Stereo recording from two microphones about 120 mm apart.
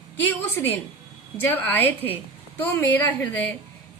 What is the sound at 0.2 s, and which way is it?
A woman's voice, 20° left (ahead or behind).